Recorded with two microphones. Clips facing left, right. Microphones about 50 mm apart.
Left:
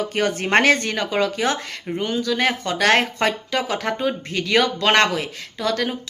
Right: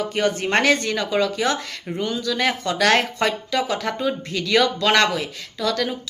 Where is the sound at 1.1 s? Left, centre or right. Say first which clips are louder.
Even; left.